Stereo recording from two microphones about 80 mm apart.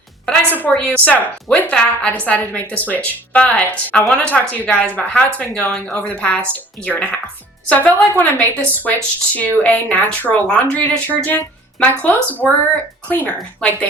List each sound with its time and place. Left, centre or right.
0.4 s a woman's voice: left